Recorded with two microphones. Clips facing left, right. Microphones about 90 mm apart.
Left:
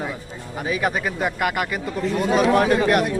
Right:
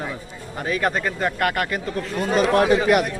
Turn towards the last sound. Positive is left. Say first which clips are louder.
# right 1 dB
turn(degrees=0)  # may be behind; listen again after turning